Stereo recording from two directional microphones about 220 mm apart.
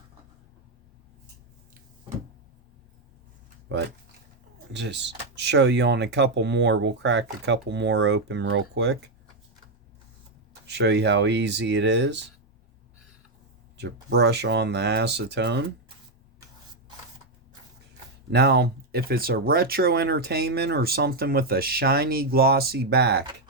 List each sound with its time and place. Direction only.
4.7 s speech: 50° right (ahead or behind)
10.7 s speech: 50° right (ahead or behind)
13.7 s speech: 50° right (ahead or behind)
18.3 s speech: 50° right (ahead or behind)